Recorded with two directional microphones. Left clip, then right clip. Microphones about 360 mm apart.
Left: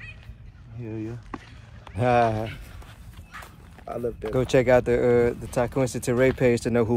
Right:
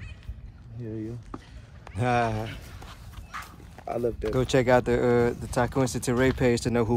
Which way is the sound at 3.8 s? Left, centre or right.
Right.